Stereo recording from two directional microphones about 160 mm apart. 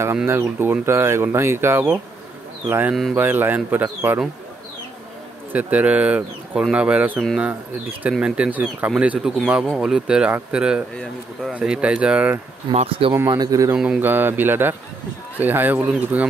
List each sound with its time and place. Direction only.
0.0 s speech: 15° right (ahead or behind)
5.5 s speech: 10° right (ahead or behind)
12.7 s speech: 35° right (ahead or behind)
13.1 s speech: 20° right (ahead or behind)
13.7 s speech: 5° right (ahead or behind)